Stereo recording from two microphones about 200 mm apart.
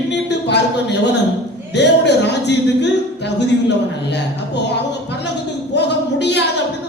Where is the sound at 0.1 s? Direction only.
60° left (ahead or behind).